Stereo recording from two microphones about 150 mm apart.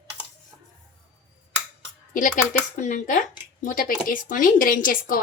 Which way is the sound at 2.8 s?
55° left (ahead or behind).